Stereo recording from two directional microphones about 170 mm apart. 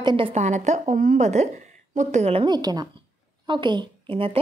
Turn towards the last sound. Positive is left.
turn(degrees=-30)  # may be behind; listen again after turning